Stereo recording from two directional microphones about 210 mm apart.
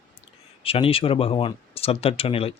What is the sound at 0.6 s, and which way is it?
Speech, 25° left (ahead or behind).